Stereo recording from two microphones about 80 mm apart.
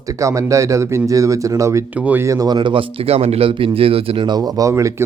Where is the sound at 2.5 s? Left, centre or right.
Right.